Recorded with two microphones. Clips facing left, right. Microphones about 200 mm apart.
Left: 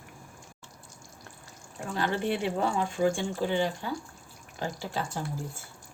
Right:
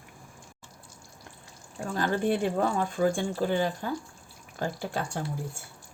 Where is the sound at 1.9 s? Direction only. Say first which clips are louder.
Right 2 dB; 45° right (ahead or behind).